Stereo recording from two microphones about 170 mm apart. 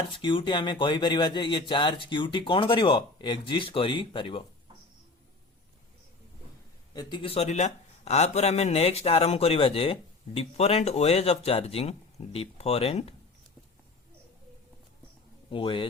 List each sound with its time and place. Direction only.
0.1 s speech: 30° left (ahead or behind)
6.9 s speech: 25° left (ahead or behind)
15.4 s speech: 30° left (ahead or behind)